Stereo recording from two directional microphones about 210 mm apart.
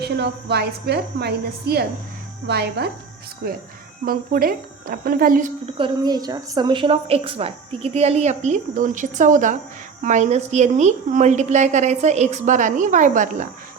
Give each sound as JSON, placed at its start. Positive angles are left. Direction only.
{"t": 0.0, "sound": "a woman's voice", "side_deg": -50}
{"t": 4.0, "sound": "a woman's voice", "side_deg": -45}
{"t": 5.7, "sound": "a woman's voice", "side_deg": -20}